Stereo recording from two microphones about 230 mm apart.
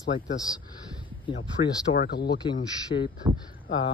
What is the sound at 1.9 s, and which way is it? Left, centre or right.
Speech, left.